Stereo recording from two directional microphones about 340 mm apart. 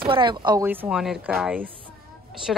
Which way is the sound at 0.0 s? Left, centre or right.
Centre.